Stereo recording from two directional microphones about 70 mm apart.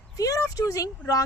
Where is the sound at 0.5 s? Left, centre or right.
Left.